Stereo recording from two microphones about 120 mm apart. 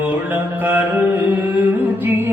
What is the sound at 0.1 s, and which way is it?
Mantra, 15° right (ahead or behind).